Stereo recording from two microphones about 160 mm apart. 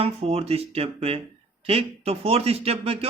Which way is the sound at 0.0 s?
40° right (ahead or behind).